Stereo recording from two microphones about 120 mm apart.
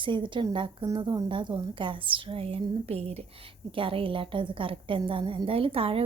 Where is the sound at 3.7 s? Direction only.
45° right (ahead or behind).